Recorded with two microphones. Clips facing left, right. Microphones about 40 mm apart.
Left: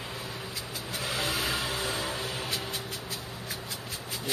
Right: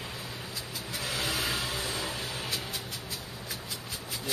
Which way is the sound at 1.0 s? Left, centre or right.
Centre.